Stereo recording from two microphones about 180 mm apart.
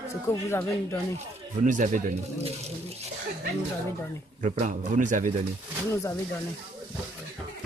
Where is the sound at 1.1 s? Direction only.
45° right (ahead or behind).